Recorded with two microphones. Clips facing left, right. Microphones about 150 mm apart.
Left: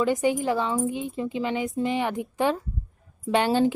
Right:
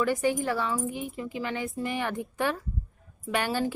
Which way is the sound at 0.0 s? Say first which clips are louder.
Left 3 dB; 20° left (ahead or behind).